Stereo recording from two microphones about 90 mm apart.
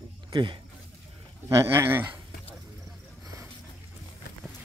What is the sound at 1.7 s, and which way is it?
Speech, 25° right (ahead or behind).